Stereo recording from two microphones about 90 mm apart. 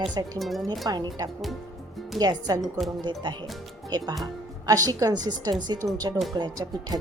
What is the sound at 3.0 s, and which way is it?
A woman's voice, 55° right (ahead or behind).